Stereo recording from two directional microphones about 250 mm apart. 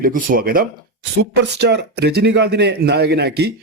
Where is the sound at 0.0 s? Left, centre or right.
Right.